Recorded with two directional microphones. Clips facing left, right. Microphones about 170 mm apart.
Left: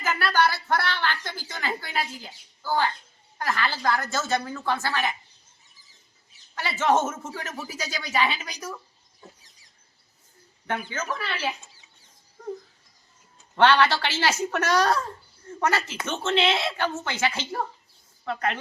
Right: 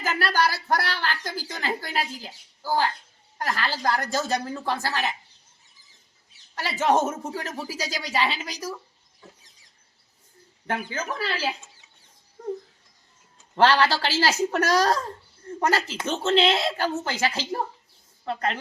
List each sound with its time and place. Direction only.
0.0 s a sound: 35° right (ahead or behind)
3.3 s speech: 35° right (ahead or behind)
6.7 s speech: 35° right (ahead or behind)
10.7 s speech: 35° right (ahead or behind)
13.6 s speech: 35° right (ahead or behind)